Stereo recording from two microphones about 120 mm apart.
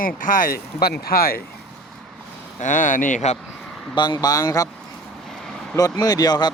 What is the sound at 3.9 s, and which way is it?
Speech, 35° left (ahead or behind).